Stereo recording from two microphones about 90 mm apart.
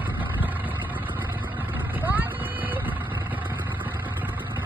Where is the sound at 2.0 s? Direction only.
20° right (ahead or behind).